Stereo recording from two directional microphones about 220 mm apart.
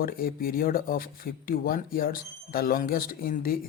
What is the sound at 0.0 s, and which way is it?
Speech, 40° left (ahead or behind).